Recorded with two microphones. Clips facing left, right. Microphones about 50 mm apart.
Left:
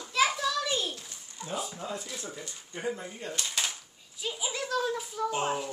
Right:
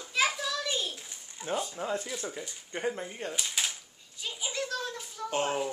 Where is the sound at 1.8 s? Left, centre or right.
Right.